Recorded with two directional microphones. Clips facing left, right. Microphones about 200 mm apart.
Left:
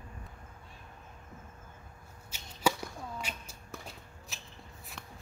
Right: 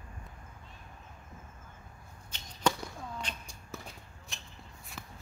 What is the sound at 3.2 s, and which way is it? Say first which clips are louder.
Music: even; 5° left (ahead or behind).